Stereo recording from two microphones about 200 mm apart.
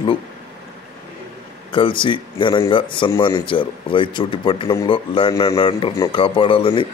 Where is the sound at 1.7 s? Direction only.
25° left (ahead or behind).